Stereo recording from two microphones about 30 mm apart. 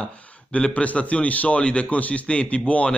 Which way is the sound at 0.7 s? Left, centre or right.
Left.